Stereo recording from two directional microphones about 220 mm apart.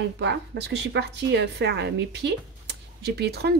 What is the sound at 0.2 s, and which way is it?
A woman's voice, 50° right (ahead or behind).